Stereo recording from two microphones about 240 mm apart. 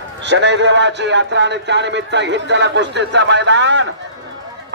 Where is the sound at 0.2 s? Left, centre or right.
Right.